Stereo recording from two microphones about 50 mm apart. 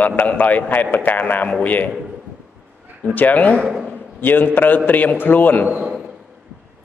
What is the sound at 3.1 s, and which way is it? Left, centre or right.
A man's voice, left.